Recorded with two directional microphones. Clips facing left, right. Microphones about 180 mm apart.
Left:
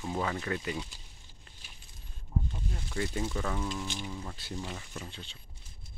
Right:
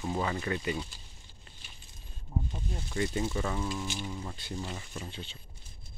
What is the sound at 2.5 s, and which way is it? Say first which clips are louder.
Snake: right 1 dB; 15° right (ahead or behind).